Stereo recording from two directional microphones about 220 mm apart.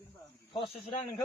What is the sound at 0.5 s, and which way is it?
Speech, 25° left (ahead or behind).